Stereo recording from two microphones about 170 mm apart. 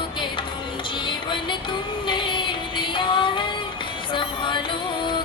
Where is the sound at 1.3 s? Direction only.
30° left (ahead or behind).